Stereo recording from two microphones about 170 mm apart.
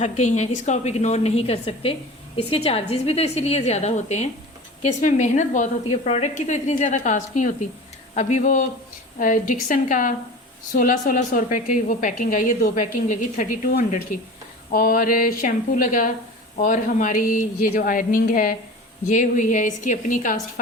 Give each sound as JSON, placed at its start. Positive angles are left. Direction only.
{"t": 0.0, "sound": "a woman's voice", "side_deg": 45}